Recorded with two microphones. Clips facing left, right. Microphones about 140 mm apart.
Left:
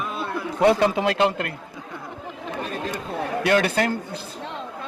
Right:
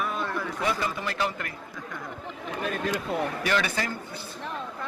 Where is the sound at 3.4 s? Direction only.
60° left (ahead or behind).